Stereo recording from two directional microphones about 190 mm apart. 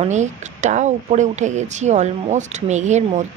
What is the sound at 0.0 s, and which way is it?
Speech, 40° right (ahead or behind).